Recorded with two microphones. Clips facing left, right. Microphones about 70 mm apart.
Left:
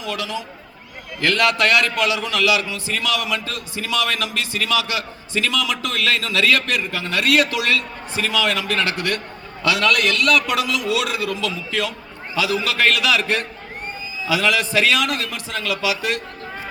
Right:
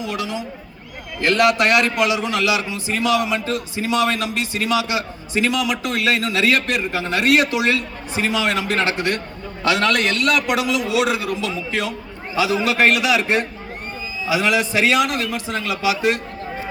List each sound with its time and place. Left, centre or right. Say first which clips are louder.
0.0 s a man's voice: right 1 dB; right